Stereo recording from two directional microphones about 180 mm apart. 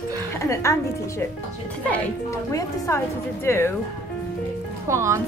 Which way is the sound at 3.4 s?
15° left (ahead or behind).